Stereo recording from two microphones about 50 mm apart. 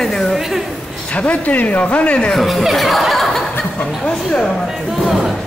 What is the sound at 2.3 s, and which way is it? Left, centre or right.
Speech, centre.